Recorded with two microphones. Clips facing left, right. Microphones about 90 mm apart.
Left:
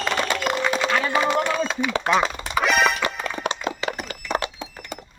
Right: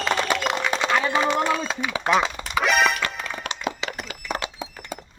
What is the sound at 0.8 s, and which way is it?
Speech, 15° right (ahead or behind).